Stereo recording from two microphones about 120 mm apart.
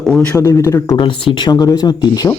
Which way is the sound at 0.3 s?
25° left (ahead or behind).